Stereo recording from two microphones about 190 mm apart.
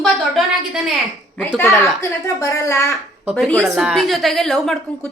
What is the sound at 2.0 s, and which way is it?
Speech, 15° left (ahead or behind).